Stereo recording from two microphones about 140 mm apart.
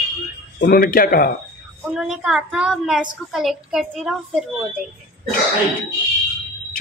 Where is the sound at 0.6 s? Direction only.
90° left.